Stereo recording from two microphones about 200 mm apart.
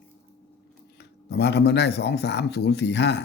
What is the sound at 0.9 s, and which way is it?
Speech, 55° left (ahead or behind).